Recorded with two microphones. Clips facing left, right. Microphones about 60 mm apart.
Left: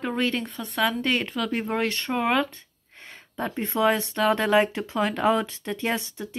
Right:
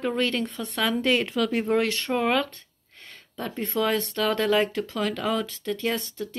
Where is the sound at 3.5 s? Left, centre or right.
Centre.